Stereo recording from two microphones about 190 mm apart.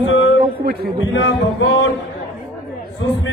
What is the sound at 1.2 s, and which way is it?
Music, 75° left (ahead or behind).